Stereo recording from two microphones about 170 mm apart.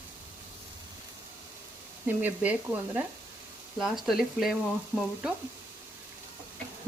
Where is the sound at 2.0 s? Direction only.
10° right (ahead or behind).